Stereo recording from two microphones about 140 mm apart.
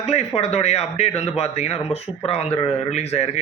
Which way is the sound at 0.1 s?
50° left (ahead or behind).